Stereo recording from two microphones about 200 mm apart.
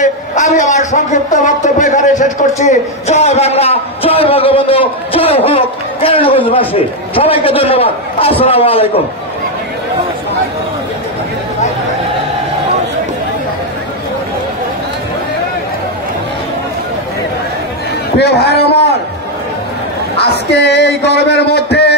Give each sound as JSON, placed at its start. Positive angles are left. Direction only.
{"t": 0.0, "sound": "a man's voice", "side_deg": 40}
{"t": 18.1, "sound": "a man's voice", "side_deg": 55}
{"t": 20.2, "sound": "speech", "side_deg": 55}